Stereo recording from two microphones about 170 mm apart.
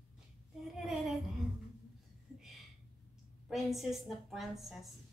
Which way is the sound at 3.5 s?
Centre (ahead or behind).